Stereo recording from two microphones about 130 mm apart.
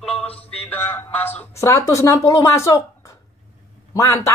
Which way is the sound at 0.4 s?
15° left (ahead or behind).